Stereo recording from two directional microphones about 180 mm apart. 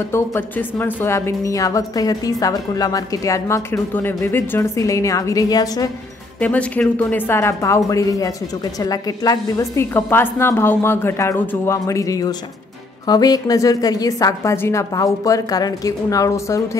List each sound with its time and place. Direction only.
0.1 s speech: 15° left (ahead or behind)
6.4 s a woman's voice: 10° left (ahead or behind)